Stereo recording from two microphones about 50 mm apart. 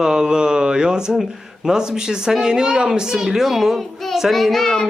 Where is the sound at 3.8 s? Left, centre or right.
Centre.